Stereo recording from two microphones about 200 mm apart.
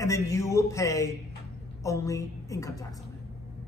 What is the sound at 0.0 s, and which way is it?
A man's voice, 15° left (ahead or behind).